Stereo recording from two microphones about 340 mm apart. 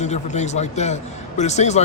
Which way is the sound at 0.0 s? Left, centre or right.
Centre.